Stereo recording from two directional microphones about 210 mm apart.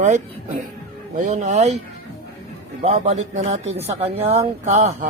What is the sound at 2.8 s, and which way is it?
A man's voice, 35° right (ahead or behind).